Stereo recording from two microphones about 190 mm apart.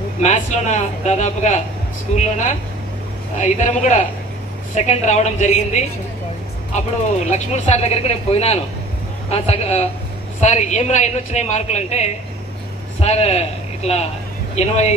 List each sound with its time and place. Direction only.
0.2 s a man's voice: 40° left (ahead or behind)
7.2 s a man's voice: 35° left (ahead or behind)